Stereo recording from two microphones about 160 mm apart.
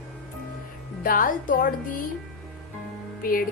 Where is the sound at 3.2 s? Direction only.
65° left (ahead or behind).